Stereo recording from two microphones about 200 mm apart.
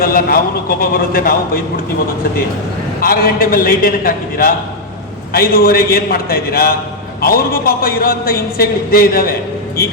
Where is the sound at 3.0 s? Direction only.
45° left (ahead or behind).